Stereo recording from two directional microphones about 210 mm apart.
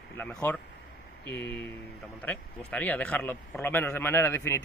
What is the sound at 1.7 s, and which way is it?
A man's voice, 5° left (ahead or behind).